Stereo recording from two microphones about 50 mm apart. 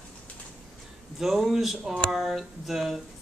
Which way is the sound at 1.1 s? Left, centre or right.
Centre.